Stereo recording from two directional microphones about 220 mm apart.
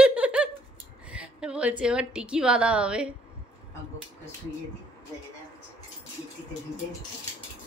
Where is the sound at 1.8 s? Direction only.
5° right (ahead or behind).